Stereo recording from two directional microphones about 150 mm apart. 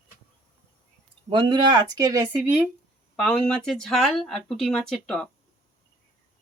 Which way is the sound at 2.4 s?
10° right (ahead or behind).